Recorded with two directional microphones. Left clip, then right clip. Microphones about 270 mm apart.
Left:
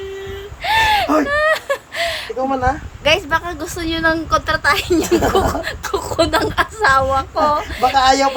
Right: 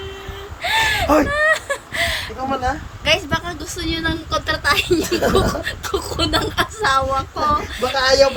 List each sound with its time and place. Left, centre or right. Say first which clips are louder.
0.6 s a sound: left 3 dB; centre
2.6 s a woman's voice: left 2 dB; centre
7.9 s a man's voice: even; left